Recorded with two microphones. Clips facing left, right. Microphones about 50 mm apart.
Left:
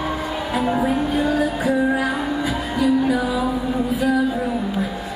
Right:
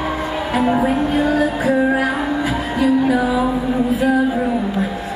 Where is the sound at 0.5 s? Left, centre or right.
Centre.